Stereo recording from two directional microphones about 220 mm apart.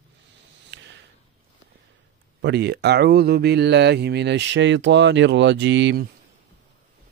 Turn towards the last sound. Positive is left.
turn(degrees=-50)  # may be behind; listen again after turning